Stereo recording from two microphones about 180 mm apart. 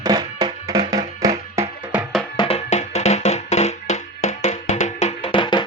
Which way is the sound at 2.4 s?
35° left (ahead or behind).